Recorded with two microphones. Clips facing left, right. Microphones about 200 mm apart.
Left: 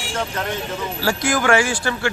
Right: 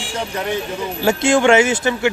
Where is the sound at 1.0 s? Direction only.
25° right (ahead or behind).